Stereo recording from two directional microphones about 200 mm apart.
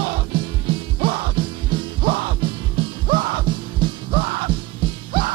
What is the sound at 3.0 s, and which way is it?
Music, 45° right (ahead or behind).